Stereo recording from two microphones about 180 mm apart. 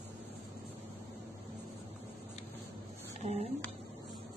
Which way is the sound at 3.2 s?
35° right (ahead or behind).